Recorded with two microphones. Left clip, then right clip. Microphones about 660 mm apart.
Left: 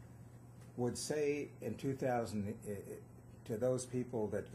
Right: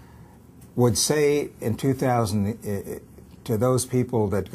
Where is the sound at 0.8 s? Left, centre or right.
Right.